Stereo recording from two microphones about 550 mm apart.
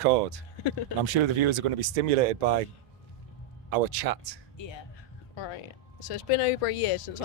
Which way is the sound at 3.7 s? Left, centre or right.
Right.